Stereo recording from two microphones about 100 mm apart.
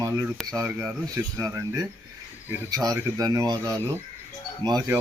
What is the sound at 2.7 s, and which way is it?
Speech, 40° right (ahead or behind).